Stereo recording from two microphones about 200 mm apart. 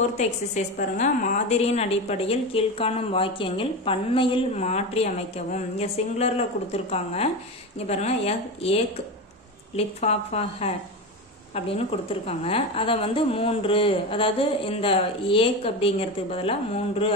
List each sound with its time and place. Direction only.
0.7 s a woman's voice: 40° left (ahead or behind)
12.3 s a woman's voice: 30° left (ahead or behind)